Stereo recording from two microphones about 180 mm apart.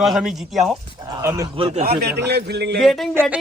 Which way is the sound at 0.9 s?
20° right (ahead or behind).